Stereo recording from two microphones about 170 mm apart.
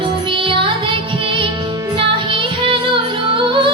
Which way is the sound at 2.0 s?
30° right (ahead or behind).